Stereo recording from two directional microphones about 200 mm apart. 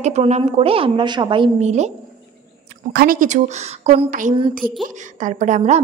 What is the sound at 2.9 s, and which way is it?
A woman's voice, 45° right (ahead or behind).